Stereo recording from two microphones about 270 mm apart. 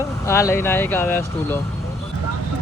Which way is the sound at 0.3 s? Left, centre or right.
Centre.